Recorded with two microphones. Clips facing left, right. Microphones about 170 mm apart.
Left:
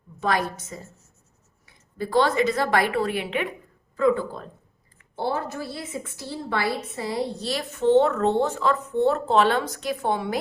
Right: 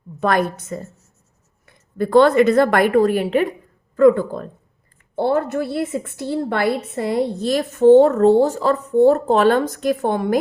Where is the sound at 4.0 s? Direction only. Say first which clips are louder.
Right 8 dB; 50° right (ahead or behind).